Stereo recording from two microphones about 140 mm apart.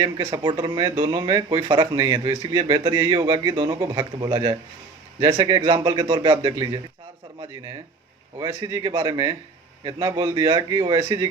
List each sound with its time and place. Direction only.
0.0 s a man's voice: 30° right (ahead or behind)
8.4 s speech: 30° right (ahead or behind)